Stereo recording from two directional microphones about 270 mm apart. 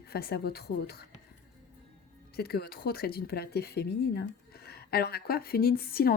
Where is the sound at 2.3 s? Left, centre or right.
Left.